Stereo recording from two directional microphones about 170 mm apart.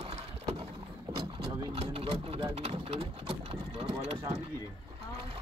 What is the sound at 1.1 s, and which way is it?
Vehicle, 20° right (ahead or behind).